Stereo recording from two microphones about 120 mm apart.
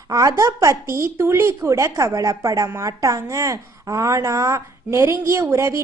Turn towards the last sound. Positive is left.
turn(degrees=-25)  # may be behind; listen again after turning